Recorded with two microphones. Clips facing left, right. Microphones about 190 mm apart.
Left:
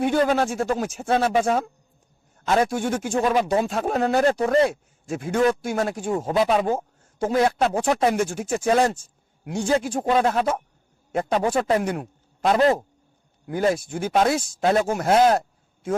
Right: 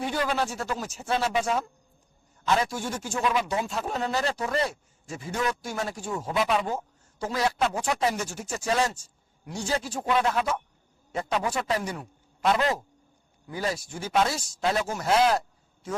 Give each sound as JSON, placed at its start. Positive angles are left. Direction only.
{"t": 0.0, "sound": "a man's voice", "side_deg": 50}
{"t": 6.3, "sound": "speech", "side_deg": 30}
{"t": 6.6, "sound": "a man's voice", "side_deg": 50}
{"t": 12.5, "sound": "speech", "side_deg": 40}
{"t": 13.5, "sound": "speech", "side_deg": 55}